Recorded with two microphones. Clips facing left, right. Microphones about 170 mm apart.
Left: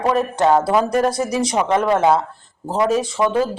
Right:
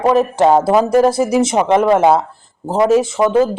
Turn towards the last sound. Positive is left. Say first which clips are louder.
# right 5 dB
turn(degrees=-25)  # may be behind; listen again after turning